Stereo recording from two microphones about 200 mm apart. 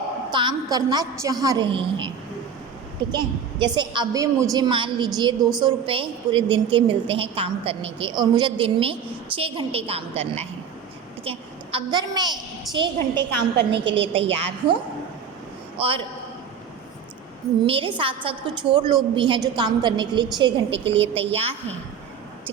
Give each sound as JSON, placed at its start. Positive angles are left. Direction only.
{"t": 0.3, "sound": "a woman's voice", "side_deg": -25}
{"t": 15.8, "sound": "a woman's voice", "side_deg": -25}
{"t": 17.7, "sound": "a woman's voice", "side_deg": -25}